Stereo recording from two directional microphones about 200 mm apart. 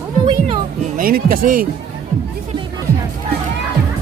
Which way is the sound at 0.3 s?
25° right (ahead or behind).